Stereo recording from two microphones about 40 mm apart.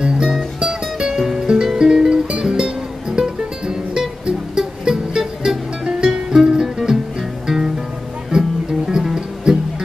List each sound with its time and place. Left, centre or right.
0.0 s music: centre